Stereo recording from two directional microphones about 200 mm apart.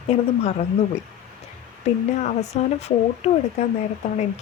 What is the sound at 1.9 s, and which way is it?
A woman's voice, 35° left (ahead or behind).